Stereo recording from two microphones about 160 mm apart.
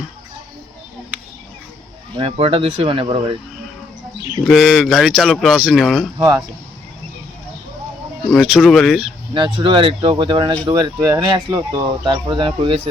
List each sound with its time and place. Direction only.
2.1 s speech: 35° right (ahead or behind)
4.4 s speech: centre (ahead or behind)
6.1 s speech: 20° right (ahead or behind)
8.3 s speech: centre (ahead or behind)
9.3 s speech: 30° right (ahead or behind)